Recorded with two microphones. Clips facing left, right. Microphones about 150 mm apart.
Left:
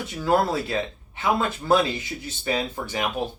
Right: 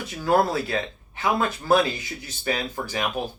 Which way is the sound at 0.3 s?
25° left (ahead or behind).